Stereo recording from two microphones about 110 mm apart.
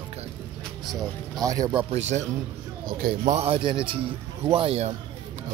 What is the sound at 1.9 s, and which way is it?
Speech, 90° right.